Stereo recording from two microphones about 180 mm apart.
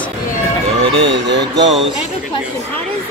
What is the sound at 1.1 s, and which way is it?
Speech, 75° right (ahead or behind).